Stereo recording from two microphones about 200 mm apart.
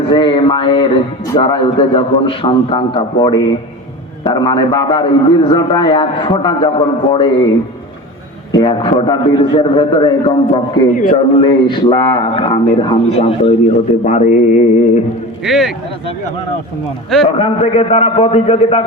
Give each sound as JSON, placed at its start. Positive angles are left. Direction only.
{"t": 0.1, "sound": "speech", "side_deg": 25}
{"t": 8.5, "sound": "speech", "side_deg": 25}
{"t": 10.9, "sound": "speech", "side_deg": 40}
{"t": 11.4, "sound": "speech", "side_deg": 25}
{"t": 15.4, "sound": "speech", "side_deg": 0}
{"t": 17.2, "sound": "speech", "side_deg": 30}